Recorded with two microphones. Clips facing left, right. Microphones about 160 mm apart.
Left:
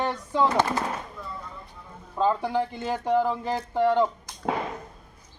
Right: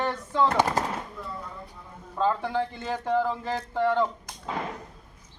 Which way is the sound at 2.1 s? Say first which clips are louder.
Left 2 dB; 15° left (ahead or behind).